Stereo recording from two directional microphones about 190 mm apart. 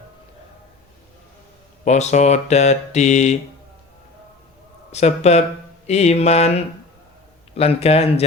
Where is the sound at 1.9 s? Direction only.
35° left (ahead or behind).